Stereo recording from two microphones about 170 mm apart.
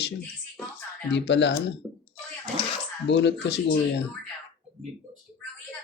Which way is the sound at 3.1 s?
90° left.